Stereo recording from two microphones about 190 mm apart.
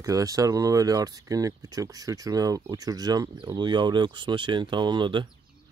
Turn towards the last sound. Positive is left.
turn(degrees=-25)  # may be behind; listen again after turning